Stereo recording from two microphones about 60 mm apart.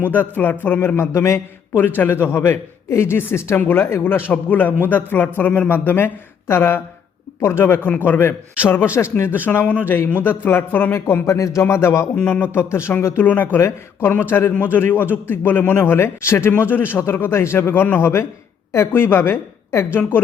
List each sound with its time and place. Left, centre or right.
0.1 s a woman's voice: left
0.9 s a man's voice: left
4.0 s a woman's voice: left
5.6 s a woman's voice: left
11.3 s a man's voice: left
12.6 s a man's voice: left
13.2 s a woman's voice: left
13.6 s a woman's voice: left